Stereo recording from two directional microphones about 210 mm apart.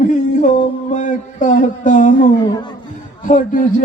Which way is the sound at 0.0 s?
35° left (ahead or behind).